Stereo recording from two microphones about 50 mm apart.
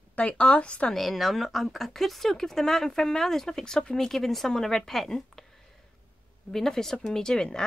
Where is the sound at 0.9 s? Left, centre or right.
Centre.